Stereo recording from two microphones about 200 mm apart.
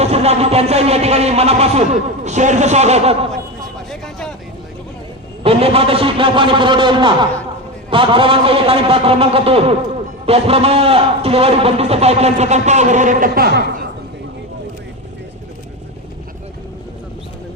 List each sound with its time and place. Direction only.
0.0 s a man's voice: 30° right (ahead or behind)
5.4 s a man's voice: 30° right (ahead or behind); by 13.8 s 50° right (ahead or behind)